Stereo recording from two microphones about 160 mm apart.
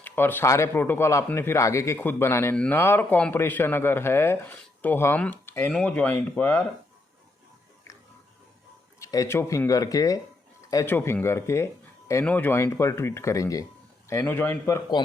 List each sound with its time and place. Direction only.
0.0 s speech: 10° left (ahead or behind)
9.0 s speech: 20° left (ahead or behind)